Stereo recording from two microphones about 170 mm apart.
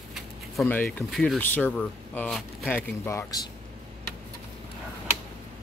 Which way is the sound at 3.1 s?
20° left (ahead or behind).